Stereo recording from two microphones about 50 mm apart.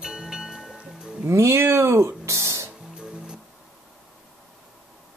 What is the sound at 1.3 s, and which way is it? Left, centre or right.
Speech, right.